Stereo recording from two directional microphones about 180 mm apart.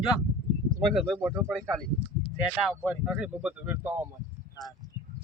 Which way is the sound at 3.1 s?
5° right (ahead or behind).